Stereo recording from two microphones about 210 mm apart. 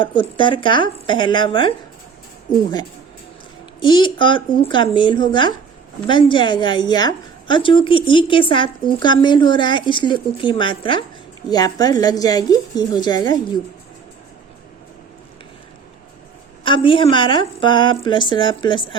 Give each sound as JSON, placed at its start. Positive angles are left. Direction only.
{"t": 0.0, "sound": "a woman's voice", "side_deg": 25}
{"t": 2.5, "sound": "speech", "side_deg": 40}
{"t": 3.8, "sound": "a woman's voice", "side_deg": 20}
{"t": 16.6, "sound": "a woman's voice", "side_deg": 25}